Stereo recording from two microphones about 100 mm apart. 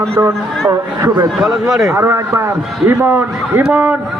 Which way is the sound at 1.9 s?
25° right (ahead or behind).